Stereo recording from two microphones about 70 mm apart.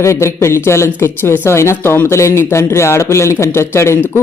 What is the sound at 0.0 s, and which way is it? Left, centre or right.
A man's voice, left.